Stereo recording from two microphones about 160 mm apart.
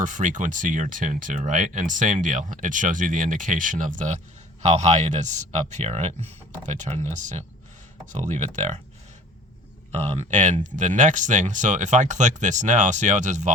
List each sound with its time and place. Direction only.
0.0 s speech: 50° right (ahead or behind)
9.9 s speech: 45° right (ahead or behind)